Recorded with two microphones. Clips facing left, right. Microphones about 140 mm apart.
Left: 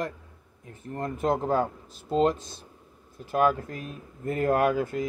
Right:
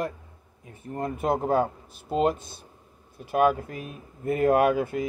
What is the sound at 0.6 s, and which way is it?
Speech, 10° right (ahead or behind).